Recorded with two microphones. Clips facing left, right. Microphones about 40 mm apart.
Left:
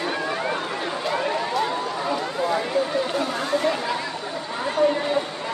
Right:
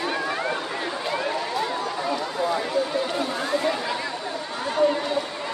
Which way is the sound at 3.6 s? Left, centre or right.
Centre.